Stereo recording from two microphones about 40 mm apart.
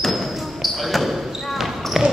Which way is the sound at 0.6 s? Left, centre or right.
Centre.